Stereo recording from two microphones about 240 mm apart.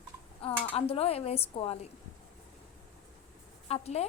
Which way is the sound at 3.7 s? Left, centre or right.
Left.